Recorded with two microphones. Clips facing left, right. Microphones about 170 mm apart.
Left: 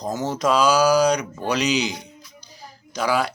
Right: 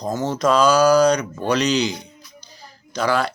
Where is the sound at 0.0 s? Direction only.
5° left (ahead or behind).